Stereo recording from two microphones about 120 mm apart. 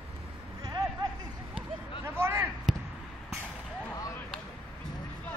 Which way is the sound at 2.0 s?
20° right (ahead or behind).